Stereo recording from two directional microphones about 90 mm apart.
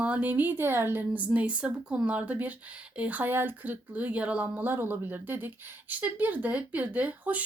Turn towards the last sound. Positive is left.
turn(degrees=-20)  # may be behind; listen again after turning